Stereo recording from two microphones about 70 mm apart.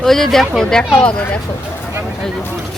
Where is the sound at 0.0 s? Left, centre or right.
Centre.